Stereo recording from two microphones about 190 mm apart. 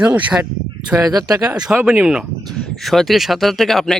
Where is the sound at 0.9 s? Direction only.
20° right (ahead or behind).